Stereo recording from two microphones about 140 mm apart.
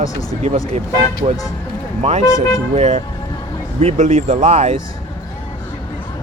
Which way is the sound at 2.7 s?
55° right (ahead or behind).